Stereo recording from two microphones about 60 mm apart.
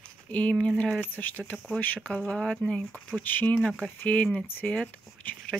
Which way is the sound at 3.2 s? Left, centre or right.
Left.